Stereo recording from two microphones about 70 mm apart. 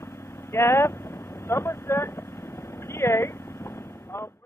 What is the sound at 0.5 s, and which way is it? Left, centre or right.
Speech, left.